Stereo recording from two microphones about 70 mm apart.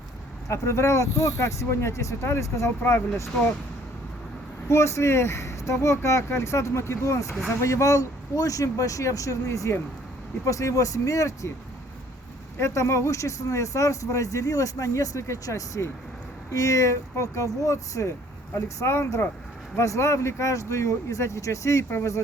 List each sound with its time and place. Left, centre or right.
0.4 s speech: left
4.7 s speech: left
12.5 s speech: left
18.5 s speech: left